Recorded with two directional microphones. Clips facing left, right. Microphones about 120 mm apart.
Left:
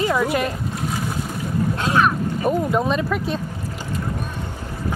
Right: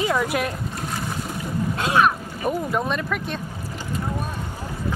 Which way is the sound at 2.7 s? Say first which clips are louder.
Left 4 dB; 5° left (ahead or behind).